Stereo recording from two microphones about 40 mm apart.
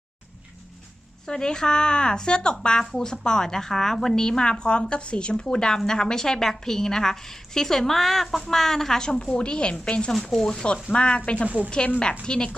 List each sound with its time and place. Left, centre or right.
1.3 s a woman's voice: centre
10.1 s speech: centre
10.5 s a woman's voice: centre
11.4 s speech: right
12.2 s a woman's voice: left